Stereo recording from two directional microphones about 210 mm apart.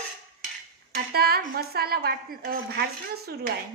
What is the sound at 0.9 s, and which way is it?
Speech, 50° right (ahead or behind).